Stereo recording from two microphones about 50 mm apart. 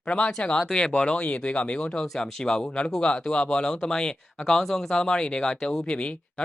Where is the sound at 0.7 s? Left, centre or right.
Centre.